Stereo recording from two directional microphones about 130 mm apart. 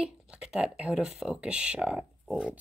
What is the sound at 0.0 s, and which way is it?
Speech, 5° right (ahead or behind).